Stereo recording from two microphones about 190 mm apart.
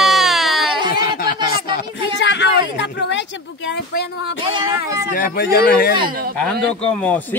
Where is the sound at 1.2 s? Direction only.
55° left (ahead or behind).